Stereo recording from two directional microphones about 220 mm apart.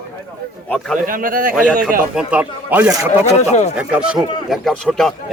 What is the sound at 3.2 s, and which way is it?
Speech, 30° left (ahead or behind).